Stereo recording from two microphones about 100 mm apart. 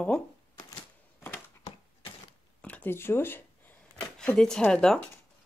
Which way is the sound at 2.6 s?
15° left (ahead or behind).